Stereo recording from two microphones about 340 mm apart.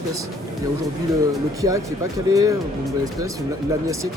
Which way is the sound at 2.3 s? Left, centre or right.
Centre.